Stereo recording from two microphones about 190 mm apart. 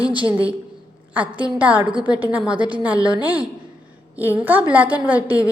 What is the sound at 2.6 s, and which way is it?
Speech, 25° right (ahead or behind).